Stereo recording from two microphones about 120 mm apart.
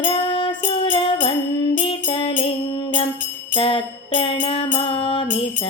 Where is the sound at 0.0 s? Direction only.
50° left (ahead or behind).